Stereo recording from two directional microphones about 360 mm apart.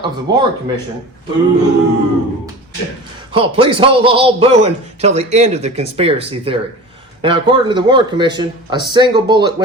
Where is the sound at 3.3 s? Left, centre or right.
Centre.